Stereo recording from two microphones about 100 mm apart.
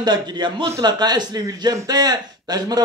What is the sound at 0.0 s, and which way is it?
Speech, 45° right (ahead or behind).